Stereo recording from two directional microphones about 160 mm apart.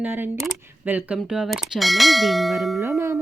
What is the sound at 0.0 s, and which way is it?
Speech, 15° right (ahead or behind).